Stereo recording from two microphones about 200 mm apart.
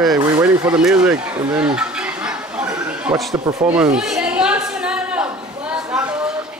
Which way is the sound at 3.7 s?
5° right (ahead or behind).